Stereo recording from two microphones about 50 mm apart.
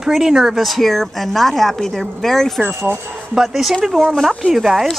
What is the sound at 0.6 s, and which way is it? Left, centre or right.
A woman's voice, centre.